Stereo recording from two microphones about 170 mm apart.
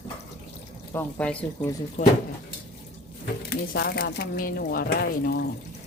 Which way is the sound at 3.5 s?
70° left (ahead or behind).